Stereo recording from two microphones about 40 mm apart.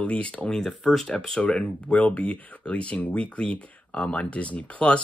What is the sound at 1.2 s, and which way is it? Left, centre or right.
Speech, centre.